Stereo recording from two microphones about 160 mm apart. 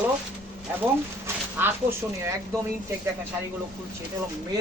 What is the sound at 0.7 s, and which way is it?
Speech, 10° right (ahead or behind).